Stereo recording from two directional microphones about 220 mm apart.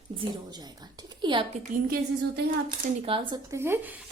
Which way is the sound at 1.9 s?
45° right (ahead or behind).